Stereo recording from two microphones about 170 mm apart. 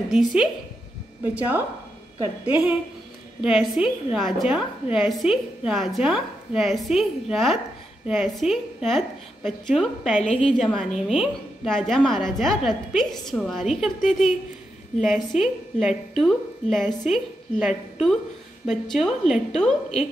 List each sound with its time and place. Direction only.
0.1 s a woman's voice: centre (ahead or behind)
3.3 s a woman's voice: centre (ahead or behind)
10.2 s a woman's voice: 45° left (ahead or behind)
10.6 s a woman's voice: centre (ahead or behind)
15.3 s a woman's voice: 5° right (ahead or behind)